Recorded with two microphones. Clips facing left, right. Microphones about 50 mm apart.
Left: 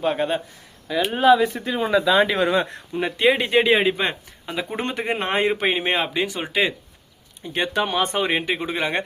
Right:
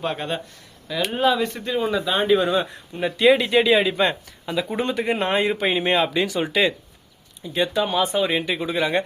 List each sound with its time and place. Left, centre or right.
0.0 s speech: centre
1.9 s speech: left
3.4 s speech: left
3.9 s speech: centre
4.8 s speech: left; by 6.7 s centre
7.4 s speech: left